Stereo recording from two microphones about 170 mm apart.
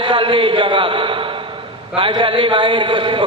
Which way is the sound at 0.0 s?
30° right (ahead or behind).